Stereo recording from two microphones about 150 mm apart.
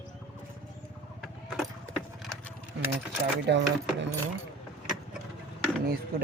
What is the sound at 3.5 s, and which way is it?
Speech, 90° right.